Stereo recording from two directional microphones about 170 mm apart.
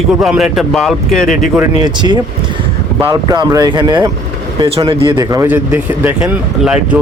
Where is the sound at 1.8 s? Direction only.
25° right (ahead or behind); by 7.0 s 5° right (ahead or behind).